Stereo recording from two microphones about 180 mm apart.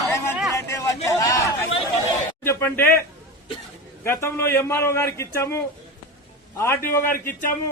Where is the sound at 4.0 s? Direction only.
15° left (ahead or behind).